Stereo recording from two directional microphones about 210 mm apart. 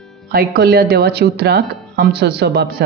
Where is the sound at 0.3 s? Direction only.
45° right (ahead or behind).